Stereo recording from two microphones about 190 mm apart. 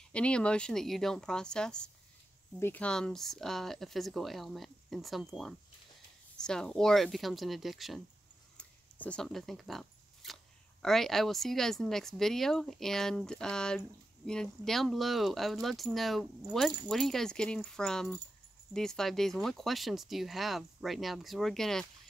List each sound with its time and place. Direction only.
0.1 s speech: 5° left (ahead or behind)